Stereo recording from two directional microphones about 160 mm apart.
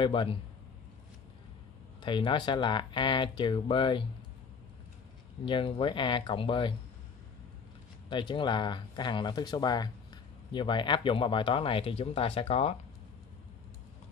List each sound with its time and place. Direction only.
0.0 s speech: 30° left (ahead or behind)
2.0 s speech: 30° left (ahead or behind)
5.4 s speech: 30° left (ahead or behind)
8.1 s speech: 30° left (ahead or behind)